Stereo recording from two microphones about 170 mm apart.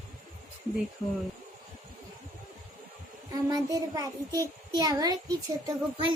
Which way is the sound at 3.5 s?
20° right (ahead or behind).